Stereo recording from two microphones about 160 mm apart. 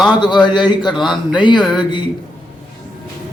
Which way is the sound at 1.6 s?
Centre (ahead or behind).